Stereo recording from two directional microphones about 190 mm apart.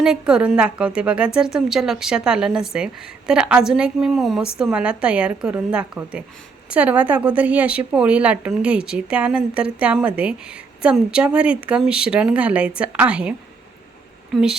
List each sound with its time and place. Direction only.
0.0 s a woman's voice: 5° right (ahead or behind)
14.3 s a woman's voice: centre (ahead or behind)